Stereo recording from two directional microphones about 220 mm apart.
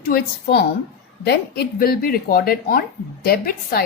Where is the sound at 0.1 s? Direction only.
45° left (ahead or behind).